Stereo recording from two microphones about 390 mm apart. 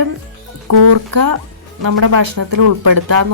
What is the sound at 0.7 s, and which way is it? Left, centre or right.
Speech, right.